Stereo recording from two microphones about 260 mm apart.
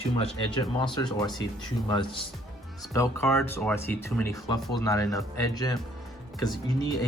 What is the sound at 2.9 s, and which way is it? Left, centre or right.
Speech, centre.